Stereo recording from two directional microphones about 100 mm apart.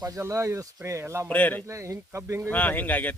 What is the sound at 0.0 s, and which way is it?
Speech, 35° right (ahead or behind).